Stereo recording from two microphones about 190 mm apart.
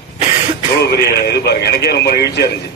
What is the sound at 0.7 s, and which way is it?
A man's voice, 60° left (ahead or behind).